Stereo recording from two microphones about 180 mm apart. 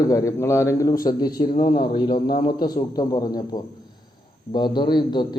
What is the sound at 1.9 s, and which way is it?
Speech, 25° left (ahead or behind).